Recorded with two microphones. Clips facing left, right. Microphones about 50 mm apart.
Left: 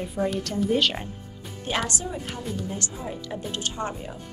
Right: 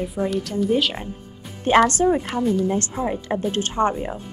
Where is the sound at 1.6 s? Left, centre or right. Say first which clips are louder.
Right 13 dB; right.